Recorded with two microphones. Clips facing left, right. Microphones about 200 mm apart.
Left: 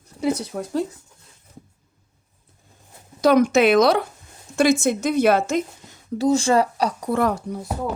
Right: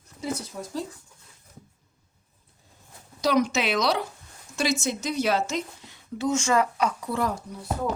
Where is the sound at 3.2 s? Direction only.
55° left (ahead or behind); by 7.1 s 35° left (ahead or behind).